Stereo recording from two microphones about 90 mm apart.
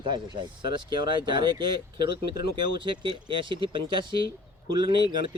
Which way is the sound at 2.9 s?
65° right (ahead or behind).